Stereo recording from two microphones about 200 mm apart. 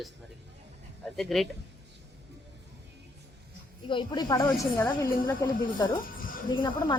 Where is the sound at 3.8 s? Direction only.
25° left (ahead or behind).